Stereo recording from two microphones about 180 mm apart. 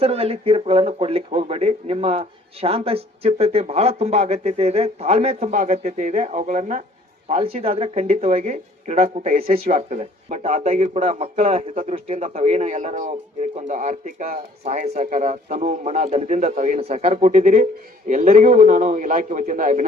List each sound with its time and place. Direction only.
0.0 s a man's voice: 35° right (ahead or behind)